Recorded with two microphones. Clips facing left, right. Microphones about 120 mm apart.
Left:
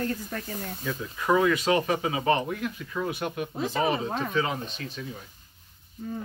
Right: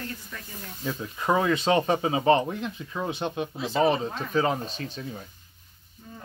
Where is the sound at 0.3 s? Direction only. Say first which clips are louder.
Left 7 dB; 50° left (ahead or behind).